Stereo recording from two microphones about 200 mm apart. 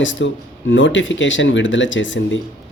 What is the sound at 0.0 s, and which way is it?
Speech, 65° left (ahead or behind).